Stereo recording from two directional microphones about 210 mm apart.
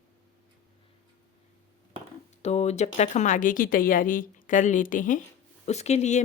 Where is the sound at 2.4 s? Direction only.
30° left (ahead or behind).